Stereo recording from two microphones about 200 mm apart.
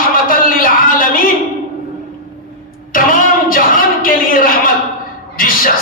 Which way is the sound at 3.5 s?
45° left (ahead or behind).